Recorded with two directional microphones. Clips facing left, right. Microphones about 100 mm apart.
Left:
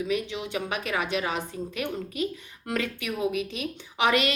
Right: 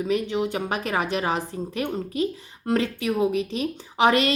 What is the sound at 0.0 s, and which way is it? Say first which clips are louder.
A woman's voice: right 5 dB; 40° right (ahead or behind).